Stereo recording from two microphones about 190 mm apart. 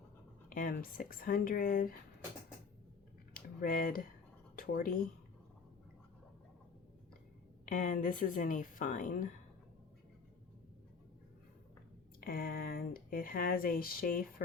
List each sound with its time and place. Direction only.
0.5 s speech: 50° left (ahead or behind)
3.3 s a sound: 50° left (ahead or behind)
4.5 s speech: 50° left (ahead or behind)
7.6 s speech: 45° left (ahead or behind)
12.2 s speech: 50° left (ahead or behind)